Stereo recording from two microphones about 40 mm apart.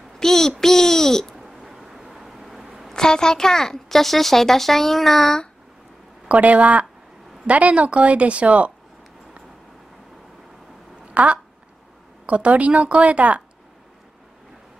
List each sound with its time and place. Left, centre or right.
0.2 s speech: centre
1.3 s a sound: centre
2.9 s speech: centre
6.2 s a woman's voice: right
11.2 s a woman's voice: right